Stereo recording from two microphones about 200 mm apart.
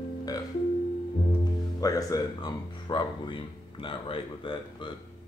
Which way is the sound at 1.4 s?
15° left (ahead or behind).